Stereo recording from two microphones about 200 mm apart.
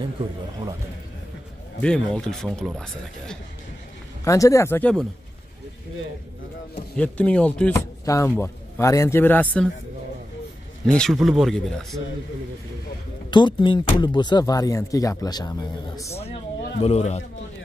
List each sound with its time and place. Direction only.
1.8 s speech: 5° left (ahead or behind)
4.2 s a man's voice: 15° left (ahead or behind)
7.0 s a man's voice: 5° left (ahead or behind)
10.9 s speech: 5° left (ahead or behind)
13.3 s speech: 25° left (ahead or behind)
16.8 s speech: 30° left (ahead or behind)